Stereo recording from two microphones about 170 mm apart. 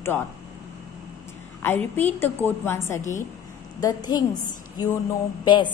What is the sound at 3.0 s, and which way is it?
Speech, 45° left (ahead or behind).